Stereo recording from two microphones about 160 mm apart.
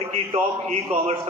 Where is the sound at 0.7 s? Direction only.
35° right (ahead or behind).